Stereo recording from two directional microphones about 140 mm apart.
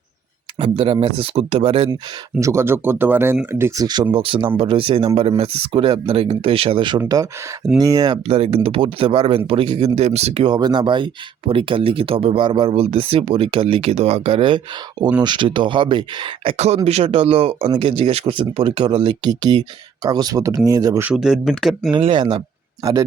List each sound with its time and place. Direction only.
0.6 s speech: 40° right (ahead or behind)
2.4 s speech: 20° right (ahead or behind)
4.1 s speech: 35° right (ahead or behind)
8.3 s speech: 45° right (ahead or behind); by 21.0 s 25° right (ahead or behind)
21.0 s speech: 5° right (ahead or behind)
22.0 s speech: 35° right (ahead or behind)